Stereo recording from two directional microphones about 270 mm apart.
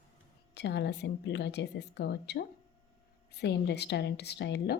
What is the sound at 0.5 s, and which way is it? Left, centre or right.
Speech, left.